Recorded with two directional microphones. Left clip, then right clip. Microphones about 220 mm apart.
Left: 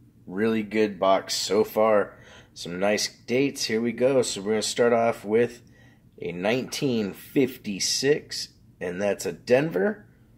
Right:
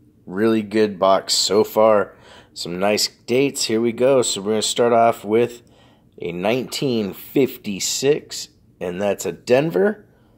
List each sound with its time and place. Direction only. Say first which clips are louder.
0.3 s speech: right 7 dB; 30° right (ahead or behind)